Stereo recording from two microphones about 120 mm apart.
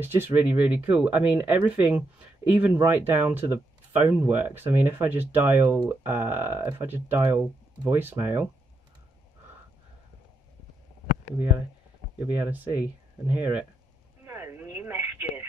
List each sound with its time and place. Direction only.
0.0 s speech: 15° right (ahead or behind)
12.2 s speech: 15° right (ahead or behind)
14.2 s telephone: 20° right (ahead or behind)